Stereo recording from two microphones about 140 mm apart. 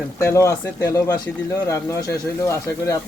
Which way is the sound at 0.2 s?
20° left (ahead or behind).